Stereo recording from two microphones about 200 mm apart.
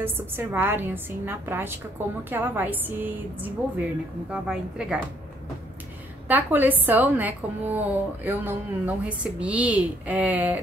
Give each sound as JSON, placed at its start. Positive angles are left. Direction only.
{"t": 0.0, "sound": "a woman's voice", "side_deg": -10}
{"t": 6.2, "sound": "a woman's voice", "side_deg": -10}